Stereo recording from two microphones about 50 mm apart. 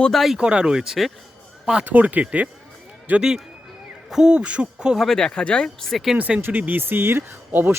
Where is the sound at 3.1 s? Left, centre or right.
Right.